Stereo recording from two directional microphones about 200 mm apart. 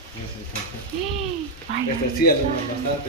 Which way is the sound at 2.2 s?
50° left (ahead or behind).